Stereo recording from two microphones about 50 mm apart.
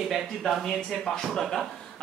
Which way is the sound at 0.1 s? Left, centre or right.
Centre.